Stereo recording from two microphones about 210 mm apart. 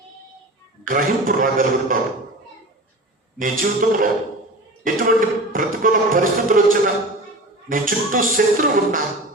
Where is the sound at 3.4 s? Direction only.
40° right (ahead or behind).